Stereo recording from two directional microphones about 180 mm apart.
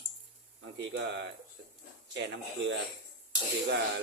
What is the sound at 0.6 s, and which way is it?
Speech, 90° right.